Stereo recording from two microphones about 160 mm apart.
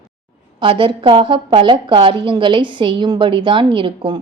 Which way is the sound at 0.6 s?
30° right (ahead or behind).